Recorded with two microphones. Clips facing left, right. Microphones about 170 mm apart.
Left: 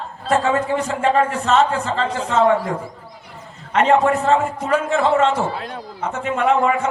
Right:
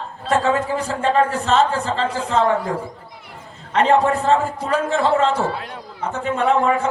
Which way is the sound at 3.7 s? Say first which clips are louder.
Left 1 dB; 35° right (ahead or behind).